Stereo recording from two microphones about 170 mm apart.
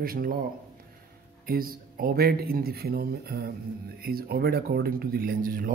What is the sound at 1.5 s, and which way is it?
Speech, 60° right (ahead or behind).